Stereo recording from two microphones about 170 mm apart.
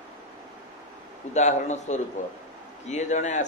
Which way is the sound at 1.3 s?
45° left (ahead or behind).